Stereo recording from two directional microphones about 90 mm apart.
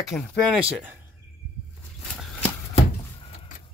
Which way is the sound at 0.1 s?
35° left (ahead or behind).